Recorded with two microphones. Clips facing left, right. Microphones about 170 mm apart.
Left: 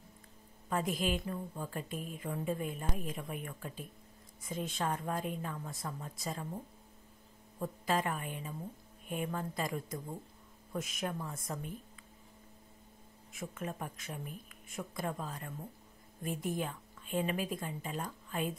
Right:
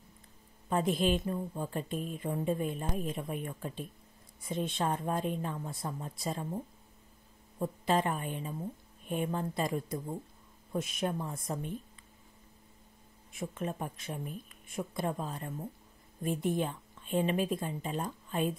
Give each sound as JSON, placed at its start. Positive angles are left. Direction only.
{"t": 0.7, "sound": "a woman's voice", "side_deg": -25}
{"t": 7.8, "sound": "a woman's voice", "side_deg": -25}
{"t": 13.3, "sound": "a woman's voice", "side_deg": -25}